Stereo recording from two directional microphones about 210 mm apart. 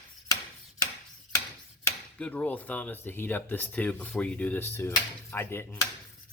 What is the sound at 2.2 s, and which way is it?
Speech, 5° left (ahead or behind).